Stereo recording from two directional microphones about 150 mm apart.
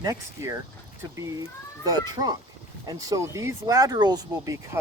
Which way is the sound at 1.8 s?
25° right (ahead or behind).